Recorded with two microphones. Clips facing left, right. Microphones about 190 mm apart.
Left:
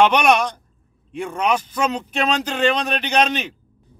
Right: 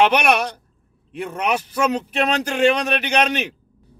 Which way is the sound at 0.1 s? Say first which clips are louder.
Left 2 dB; 10° right (ahead or behind).